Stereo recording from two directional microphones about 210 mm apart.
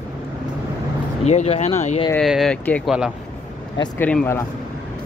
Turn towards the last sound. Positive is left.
turn(degrees=10)  # may be behind; listen again after turning